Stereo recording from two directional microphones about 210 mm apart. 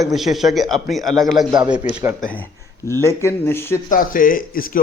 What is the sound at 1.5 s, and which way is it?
Speech, 20° right (ahead or behind).